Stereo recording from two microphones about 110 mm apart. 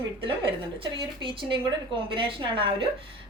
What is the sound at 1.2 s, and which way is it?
A woman's voice, 50° right (ahead or behind).